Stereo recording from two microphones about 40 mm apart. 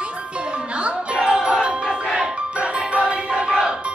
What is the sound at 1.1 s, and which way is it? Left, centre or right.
Doorbell, right.